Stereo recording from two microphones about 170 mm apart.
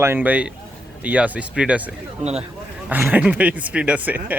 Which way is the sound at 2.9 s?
10° right (ahead or behind).